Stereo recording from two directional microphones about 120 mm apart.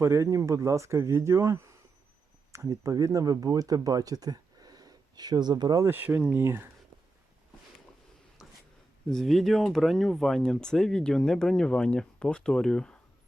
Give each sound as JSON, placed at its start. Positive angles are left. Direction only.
{"t": 0.0, "sound": "speech", "side_deg": -25}
{"t": 5.8, "sound": "speech", "side_deg": -15}
{"t": 9.0, "sound": "speech", "side_deg": 5}